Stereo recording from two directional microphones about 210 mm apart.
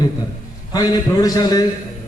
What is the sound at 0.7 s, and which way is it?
Speech, 20° left (ahead or behind).